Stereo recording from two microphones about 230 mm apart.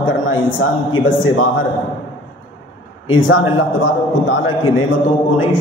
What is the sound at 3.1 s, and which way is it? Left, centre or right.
A man's voice, left.